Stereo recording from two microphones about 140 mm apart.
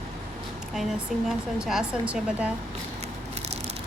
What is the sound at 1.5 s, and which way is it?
Speech, 5° right (ahead or behind).